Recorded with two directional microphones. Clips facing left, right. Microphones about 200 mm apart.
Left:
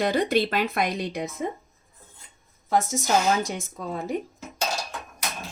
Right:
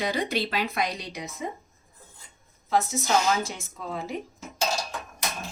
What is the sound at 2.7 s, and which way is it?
A woman's voice, 45° left (ahead or behind).